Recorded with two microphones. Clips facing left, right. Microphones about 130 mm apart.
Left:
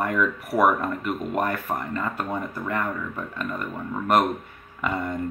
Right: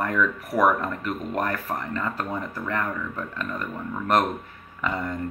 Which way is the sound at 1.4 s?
25° left (ahead or behind).